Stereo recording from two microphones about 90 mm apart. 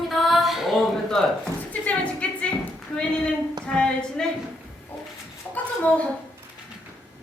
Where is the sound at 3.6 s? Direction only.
10° left (ahead or behind).